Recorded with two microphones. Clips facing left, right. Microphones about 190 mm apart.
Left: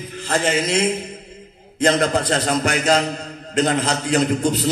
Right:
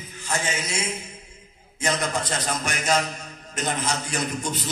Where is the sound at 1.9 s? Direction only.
80° left.